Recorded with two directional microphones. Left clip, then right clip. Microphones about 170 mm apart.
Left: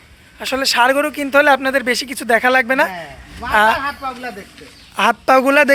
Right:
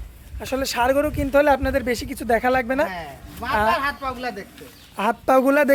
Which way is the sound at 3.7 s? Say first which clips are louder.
Left 2 dB; 25° right (ahead or behind).